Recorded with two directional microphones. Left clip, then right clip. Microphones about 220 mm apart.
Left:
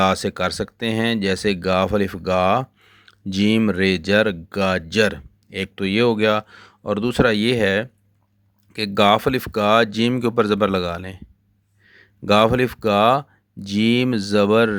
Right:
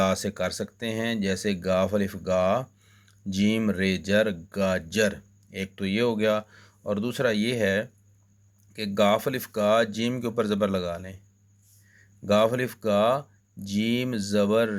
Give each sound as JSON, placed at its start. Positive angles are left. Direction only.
{"t": 0.0, "sound": "speech", "side_deg": 40}